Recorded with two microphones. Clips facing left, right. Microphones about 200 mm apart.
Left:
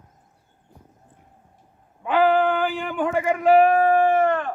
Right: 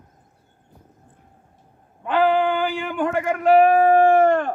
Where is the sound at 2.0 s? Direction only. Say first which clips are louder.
Even; 5° left (ahead or behind).